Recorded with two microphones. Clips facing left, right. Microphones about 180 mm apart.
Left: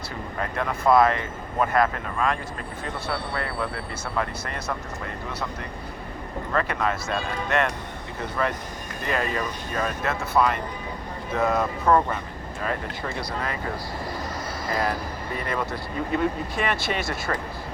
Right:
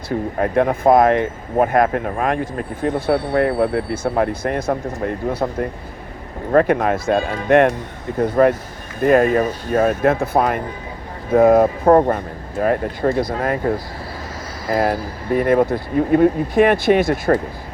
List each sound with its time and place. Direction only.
0.3 s speech: 55° right (ahead or behind)